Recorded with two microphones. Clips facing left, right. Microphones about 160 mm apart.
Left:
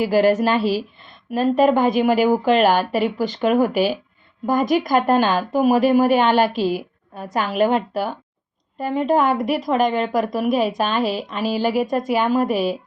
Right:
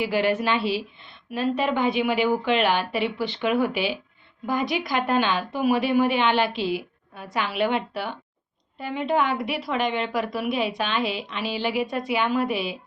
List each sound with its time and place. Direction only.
0.0 s a woman's voice: 40° left (ahead or behind)